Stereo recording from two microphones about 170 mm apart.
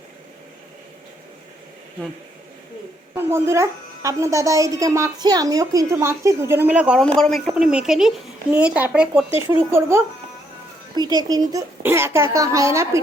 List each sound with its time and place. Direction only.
3.2 s a woman's voice: 15° right (ahead or behind)